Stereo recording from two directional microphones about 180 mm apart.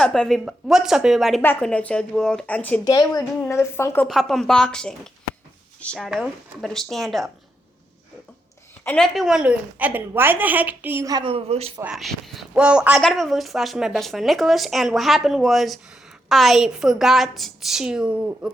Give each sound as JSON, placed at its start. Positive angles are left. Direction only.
{"t": 0.0, "sound": "a woman's voice", "side_deg": 0}
{"t": 2.8, "sound": "a woman's voice", "side_deg": 20}
{"t": 4.1, "sound": "speech", "side_deg": 0}
{"t": 8.8, "sound": "a woman's voice", "side_deg": 5}
{"t": 11.8, "sound": "speech", "side_deg": -5}